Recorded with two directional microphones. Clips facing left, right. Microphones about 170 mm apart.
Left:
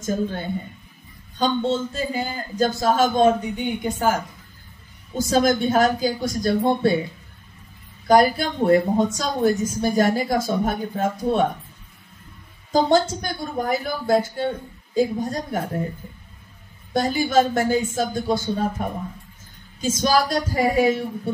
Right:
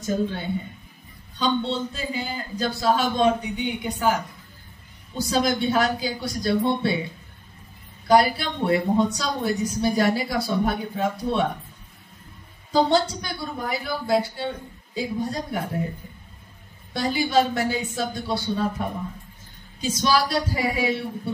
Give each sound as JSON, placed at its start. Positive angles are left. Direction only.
{"t": 0.0, "sound": "a woman's voice", "side_deg": 45}
{"t": 8.1, "sound": "a woman's voice", "side_deg": 45}
{"t": 12.7, "sound": "a woman's voice", "side_deg": 45}
{"t": 16.9, "sound": "a woman's voice", "side_deg": 45}